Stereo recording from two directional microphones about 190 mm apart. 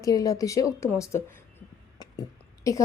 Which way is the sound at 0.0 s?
20° left (ahead or behind).